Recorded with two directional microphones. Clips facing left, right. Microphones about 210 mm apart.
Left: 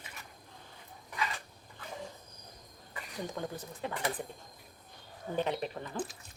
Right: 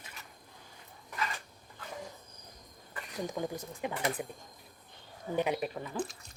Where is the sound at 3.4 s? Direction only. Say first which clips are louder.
Right 3 dB; 10° right (ahead or behind).